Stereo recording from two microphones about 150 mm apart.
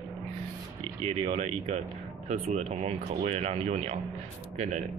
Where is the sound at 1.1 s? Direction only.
45° right (ahead or behind).